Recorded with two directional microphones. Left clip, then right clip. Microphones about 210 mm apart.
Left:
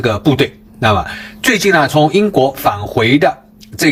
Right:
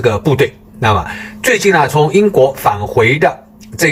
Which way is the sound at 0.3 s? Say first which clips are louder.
Right 2 dB; 35° left (ahead or behind).